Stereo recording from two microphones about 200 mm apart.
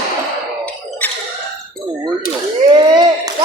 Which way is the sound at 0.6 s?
5° left (ahead or behind).